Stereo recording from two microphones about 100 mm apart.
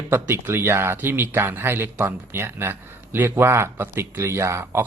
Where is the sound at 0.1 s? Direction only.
25° right (ahead or behind).